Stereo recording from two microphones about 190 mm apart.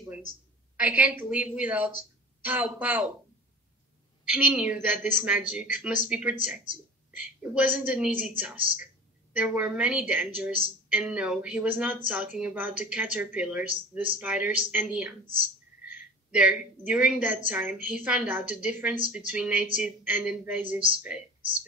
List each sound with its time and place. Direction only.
0.7 s speech: 10° right (ahead or behind)
4.2 s a woman's voice: 5° right (ahead or behind)
16.3 s a woman's voice: 5° right (ahead or behind)
21.4 s a sound: 25° right (ahead or behind)